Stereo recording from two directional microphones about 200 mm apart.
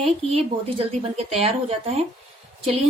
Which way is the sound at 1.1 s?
30° right (ahead or behind).